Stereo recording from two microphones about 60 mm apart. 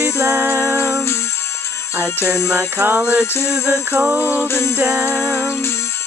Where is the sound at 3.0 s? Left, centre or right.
Right.